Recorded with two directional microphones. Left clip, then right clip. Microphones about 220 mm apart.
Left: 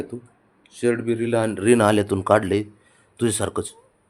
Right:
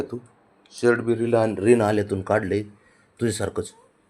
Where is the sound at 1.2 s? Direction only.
10° left (ahead or behind).